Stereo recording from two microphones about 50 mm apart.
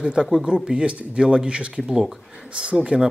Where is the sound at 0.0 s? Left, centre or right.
Centre.